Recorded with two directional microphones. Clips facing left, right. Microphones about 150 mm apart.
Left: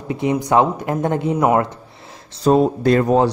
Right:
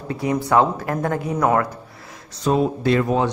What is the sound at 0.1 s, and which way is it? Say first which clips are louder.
Speech: left 2 dB; 20° left (ahead or behind).